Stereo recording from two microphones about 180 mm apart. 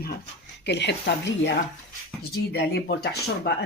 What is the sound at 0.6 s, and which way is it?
Speech, 70° left (ahead or behind).